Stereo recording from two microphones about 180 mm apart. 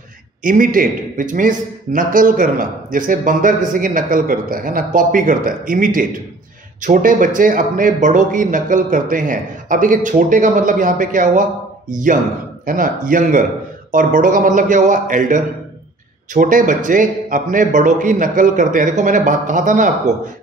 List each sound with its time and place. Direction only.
0.4 s a man's voice: 50° right (ahead or behind)
12.6 s a man's voice: 50° right (ahead or behind)